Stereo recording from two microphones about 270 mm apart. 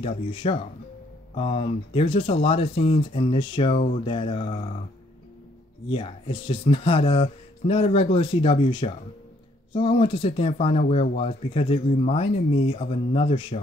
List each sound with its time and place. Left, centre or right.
0.0 s speech: left
5.9 s speech: centre